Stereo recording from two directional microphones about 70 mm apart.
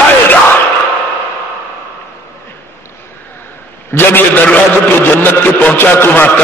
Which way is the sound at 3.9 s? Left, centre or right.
Left.